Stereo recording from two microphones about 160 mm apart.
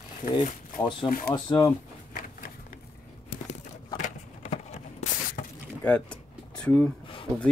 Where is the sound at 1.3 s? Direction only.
20° left (ahead or behind).